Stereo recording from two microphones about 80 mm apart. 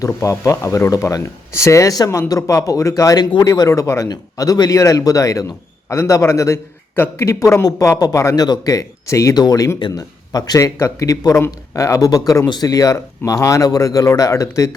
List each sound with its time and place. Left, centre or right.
0.0 s speech: left
4.1 s speech: left
6.9 s speech: left
7.3 s speech: left
8.4 s speech: left
9.3 s speech: left
11.4 s speech: left